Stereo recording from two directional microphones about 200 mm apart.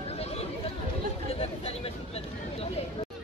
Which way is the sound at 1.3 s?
30° left (ahead or behind).